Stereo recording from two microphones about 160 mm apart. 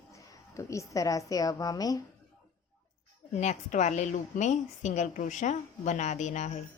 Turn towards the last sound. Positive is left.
turn(degrees=45)  # may be behind; listen again after turning